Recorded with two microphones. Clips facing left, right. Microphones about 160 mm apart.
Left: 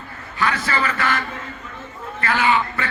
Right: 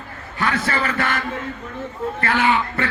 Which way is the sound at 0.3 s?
55° right (ahead or behind).